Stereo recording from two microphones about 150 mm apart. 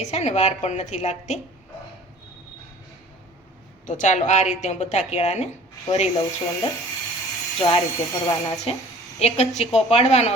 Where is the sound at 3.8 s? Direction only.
55° left (ahead or behind).